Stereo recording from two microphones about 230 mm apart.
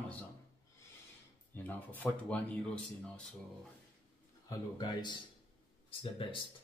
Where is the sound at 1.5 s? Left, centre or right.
Centre.